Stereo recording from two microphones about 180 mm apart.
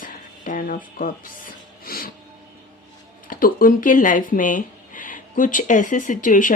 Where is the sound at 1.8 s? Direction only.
55° left (ahead or behind).